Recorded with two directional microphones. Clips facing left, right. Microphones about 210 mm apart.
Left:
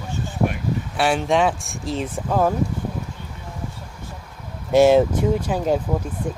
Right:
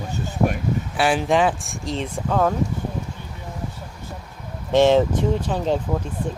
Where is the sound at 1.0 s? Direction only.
Centre (ahead or behind).